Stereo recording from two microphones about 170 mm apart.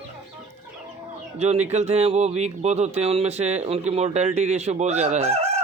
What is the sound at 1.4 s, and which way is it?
Speech, 40° right (ahead or behind).